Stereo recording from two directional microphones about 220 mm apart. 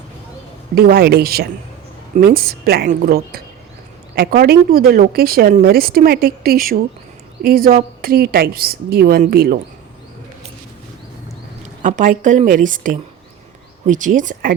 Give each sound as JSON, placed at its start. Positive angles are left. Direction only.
{"t": 0.8, "sound": "speech", "side_deg": -45}
{"t": 11.8, "sound": "a woman's voice", "side_deg": -35}